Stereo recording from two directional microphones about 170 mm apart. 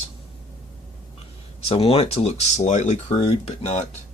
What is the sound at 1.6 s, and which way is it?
Speech, 35° left (ahead or behind).